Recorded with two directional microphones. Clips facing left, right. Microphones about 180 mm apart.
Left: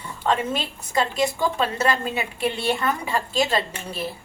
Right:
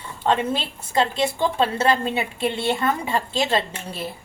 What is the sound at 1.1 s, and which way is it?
A woman's voice, 25° right (ahead or behind).